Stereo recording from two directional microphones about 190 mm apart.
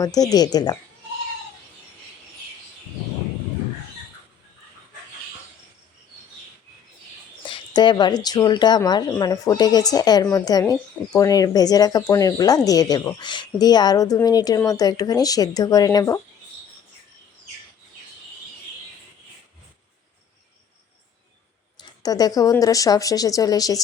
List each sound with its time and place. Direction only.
0.0 s speech: 20° left (ahead or behind)
7.4 s speech: 25° left (ahead or behind)
21.8 s speech: 20° left (ahead or behind)